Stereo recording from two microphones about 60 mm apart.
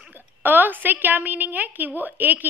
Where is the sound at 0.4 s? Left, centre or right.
Right.